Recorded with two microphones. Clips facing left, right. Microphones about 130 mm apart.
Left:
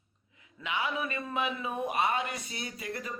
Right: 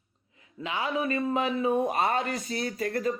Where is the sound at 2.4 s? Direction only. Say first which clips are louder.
Right 8 dB; 55° right (ahead or behind).